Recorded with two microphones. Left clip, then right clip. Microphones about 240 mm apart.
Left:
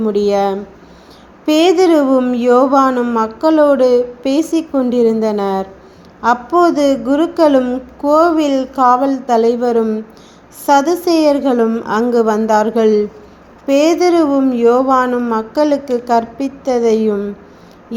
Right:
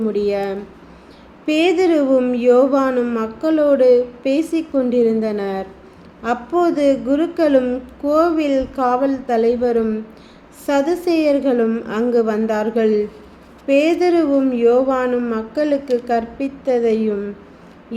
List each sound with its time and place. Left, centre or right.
0.1 s a woman's voice: left